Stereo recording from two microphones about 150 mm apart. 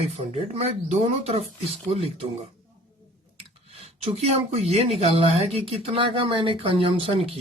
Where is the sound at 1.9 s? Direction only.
40° right (ahead or behind).